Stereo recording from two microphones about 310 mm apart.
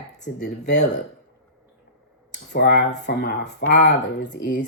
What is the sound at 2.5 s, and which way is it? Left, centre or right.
Speech, left.